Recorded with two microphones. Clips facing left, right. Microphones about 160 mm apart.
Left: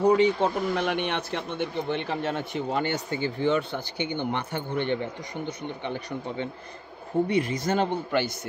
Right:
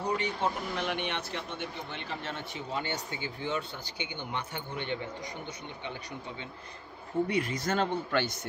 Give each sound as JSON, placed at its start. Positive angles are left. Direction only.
{"t": 0.0, "sound": "speech", "side_deg": 65}
{"t": 7.2, "sound": "speech", "side_deg": 25}